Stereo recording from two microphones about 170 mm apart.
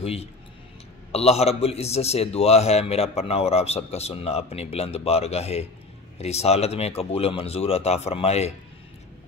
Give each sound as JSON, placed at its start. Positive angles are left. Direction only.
{"t": 0.0, "sound": "a man's voice", "side_deg": 35}